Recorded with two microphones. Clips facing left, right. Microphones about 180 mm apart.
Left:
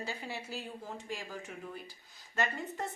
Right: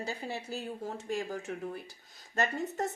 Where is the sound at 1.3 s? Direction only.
45° right (ahead or behind).